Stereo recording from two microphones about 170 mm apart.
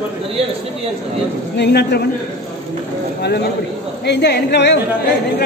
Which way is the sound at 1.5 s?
80° left.